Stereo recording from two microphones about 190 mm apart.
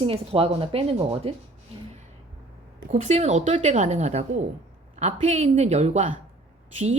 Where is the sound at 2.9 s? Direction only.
35° right (ahead or behind).